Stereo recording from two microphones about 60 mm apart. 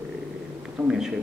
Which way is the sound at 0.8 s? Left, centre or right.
Right.